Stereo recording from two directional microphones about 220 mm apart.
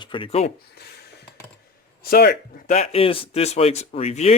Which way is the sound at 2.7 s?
30° left (ahead or behind).